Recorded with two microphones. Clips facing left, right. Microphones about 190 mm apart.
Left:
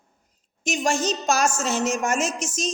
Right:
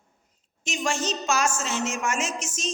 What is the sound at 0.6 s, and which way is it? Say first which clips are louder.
A woman's voice: left 4 dB; 45° left (ahead or behind).